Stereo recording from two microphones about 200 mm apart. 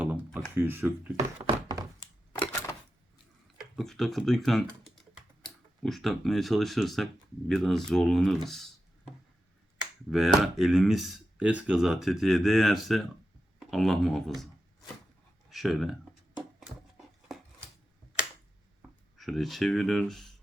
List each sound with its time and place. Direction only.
0.0 s a sound: 5° right (ahead or behind)
0.5 s speech: 10° right (ahead or behind)
1.4 s a sound: 20° right (ahead or behind)
2.3 s a sound: 15° left (ahead or behind)
3.8 s speech: centre (ahead or behind)
8.4 s computer keyboard: centre (ahead or behind)
10.1 s speech: centre (ahead or behind)
15.4 s speech: centre (ahead or behind)
18.8 s speech: centre (ahead or behind)